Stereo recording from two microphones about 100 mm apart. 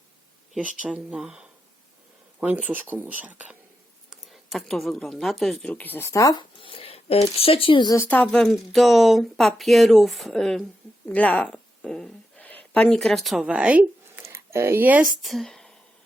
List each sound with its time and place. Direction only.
0.5 s speech: 5° right (ahead or behind)
4.3 s speech: centre (ahead or behind)
5.7 s speech: 20° left (ahead or behind)
6.1 s speech: 35° left (ahead or behind)
6.6 s speech: 65° left (ahead or behind)
8.0 s speech: 15° left (ahead or behind); by 13.4 s centre (ahead or behind)
13.4 s speech: 10° right (ahead or behind)
14.2 s a sound: 25° right (ahead or behind)
15.0 s speech: centre (ahead or behind)